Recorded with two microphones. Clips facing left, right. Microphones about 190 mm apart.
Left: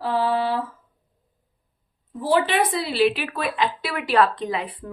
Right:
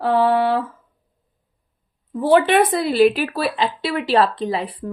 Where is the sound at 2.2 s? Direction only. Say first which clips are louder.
Right 6 dB; 65° right (ahead or behind); by 4.9 s 35° right (ahead or behind).